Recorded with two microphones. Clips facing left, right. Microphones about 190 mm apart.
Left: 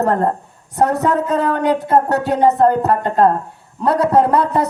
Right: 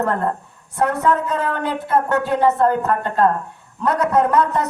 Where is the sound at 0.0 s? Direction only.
40° left (ahead or behind).